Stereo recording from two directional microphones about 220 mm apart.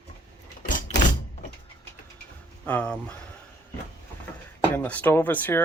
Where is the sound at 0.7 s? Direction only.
35° left (ahead or behind).